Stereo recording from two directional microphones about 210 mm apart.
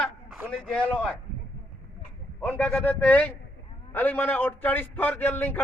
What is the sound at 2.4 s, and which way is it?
Speech, 5° left (ahead or behind).